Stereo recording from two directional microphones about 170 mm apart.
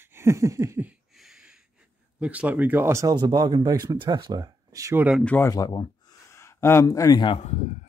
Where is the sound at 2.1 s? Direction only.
5° right (ahead or behind).